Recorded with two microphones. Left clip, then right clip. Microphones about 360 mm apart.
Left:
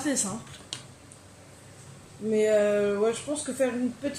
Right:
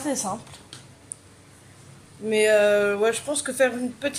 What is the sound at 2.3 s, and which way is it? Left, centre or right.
Speech, right.